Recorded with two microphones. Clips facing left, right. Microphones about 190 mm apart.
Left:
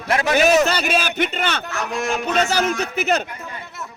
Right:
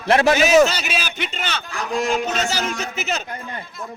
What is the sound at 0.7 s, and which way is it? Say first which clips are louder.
A man's voice: left 6 dB; 55° left (ahead or behind).